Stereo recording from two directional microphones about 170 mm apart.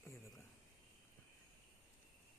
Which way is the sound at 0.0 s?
15° left (ahead or behind).